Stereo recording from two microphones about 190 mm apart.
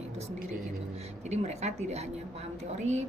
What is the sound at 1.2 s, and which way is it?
A woman's voice, 35° right (ahead or behind).